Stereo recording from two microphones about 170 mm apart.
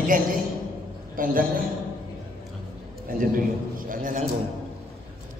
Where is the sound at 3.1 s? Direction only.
55° right (ahead or behind).